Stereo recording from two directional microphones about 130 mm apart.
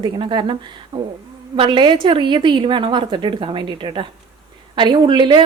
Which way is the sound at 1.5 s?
40° right (ahead or behind).